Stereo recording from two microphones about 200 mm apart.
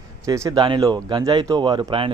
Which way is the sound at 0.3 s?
15° right (ahead or behind).